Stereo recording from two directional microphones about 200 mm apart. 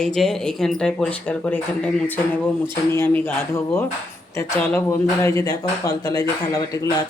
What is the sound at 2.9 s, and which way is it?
Speech, 10° left (ahead or behind).